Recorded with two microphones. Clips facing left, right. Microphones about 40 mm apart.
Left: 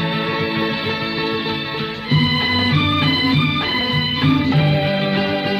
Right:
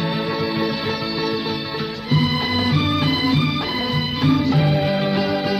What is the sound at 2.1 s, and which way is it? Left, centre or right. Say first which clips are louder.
Music: left 3 dB; left.